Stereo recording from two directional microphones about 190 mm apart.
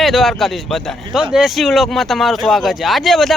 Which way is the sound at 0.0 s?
Centre (ahead or behind).